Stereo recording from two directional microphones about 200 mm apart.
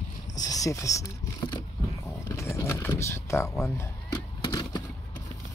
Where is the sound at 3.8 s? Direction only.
15° left (ahead or behind).